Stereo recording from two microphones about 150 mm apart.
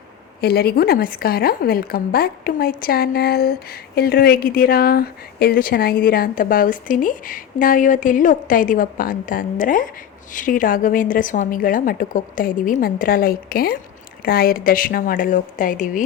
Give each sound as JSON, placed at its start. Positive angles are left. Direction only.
{"t": 0.4, "sound": "a woman's voice", "side_deg": 90}